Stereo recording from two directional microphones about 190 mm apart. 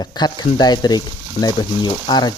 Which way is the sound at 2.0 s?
20° left (ahead or behind).